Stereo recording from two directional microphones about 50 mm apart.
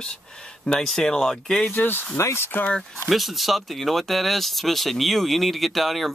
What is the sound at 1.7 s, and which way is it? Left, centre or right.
Speech, left.